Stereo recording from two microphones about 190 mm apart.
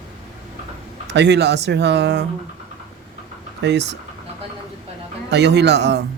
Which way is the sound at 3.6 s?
65° right (ahead or behind).